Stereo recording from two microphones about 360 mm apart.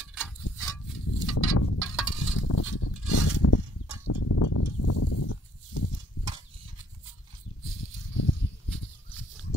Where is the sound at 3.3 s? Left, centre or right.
Left.